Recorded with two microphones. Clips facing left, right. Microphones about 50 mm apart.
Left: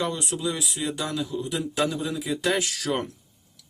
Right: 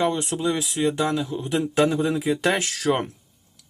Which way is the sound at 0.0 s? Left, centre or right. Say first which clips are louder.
Right 5 dB; right.